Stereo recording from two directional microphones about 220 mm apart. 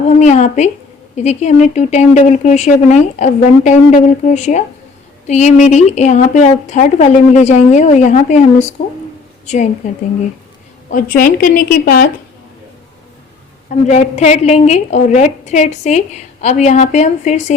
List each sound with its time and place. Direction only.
0.2 s a woman's voice: 30° left (ahead or behind)
13.8 s a woman's voice: 30° left (ahead or behind)